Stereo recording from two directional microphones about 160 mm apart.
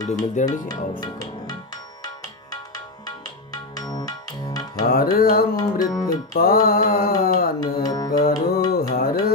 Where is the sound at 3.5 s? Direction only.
25° left (ahead or behind).